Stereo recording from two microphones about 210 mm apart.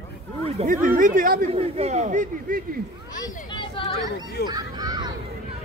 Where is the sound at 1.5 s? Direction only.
30° right (ahead or behind).